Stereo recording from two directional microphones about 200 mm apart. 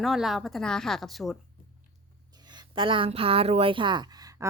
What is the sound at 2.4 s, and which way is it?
A woman's voice, 25° right (ahead or behind).